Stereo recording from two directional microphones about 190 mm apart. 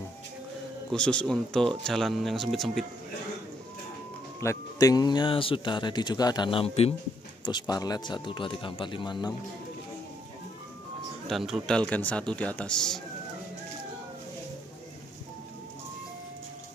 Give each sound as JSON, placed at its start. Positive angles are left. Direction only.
{"t": 0.9, "sound": "speech", "side_deg": 5}
{"t": 4.4, "sound": "speech", "side_deg": 15}
{"t": 7.4, "sound": "speech", "side_deg": 20}
{"t": 11.2, "sound": "speech", "side_deg": 0}